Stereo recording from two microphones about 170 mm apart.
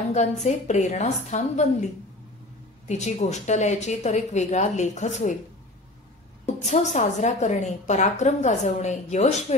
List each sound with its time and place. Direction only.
0.1 s a woman's voice: 45° left (ahead or behind)
2.9 s a woman's voice: 45° left (ahead or behind)
6.4 s a woman's voice: 40° left (ahead or behind)